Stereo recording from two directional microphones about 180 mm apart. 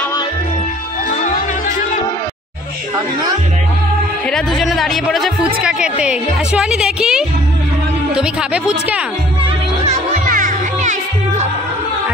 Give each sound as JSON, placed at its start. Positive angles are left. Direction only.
{"t": 4.3, "sound": "a woman's voice", "side_deg": 5}
{"t": 9.4, "sound": "music", "side_deg": -35}